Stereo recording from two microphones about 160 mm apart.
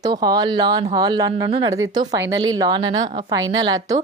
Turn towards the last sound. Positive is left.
turn(degrees=-25)  # may be behind; listen again after turning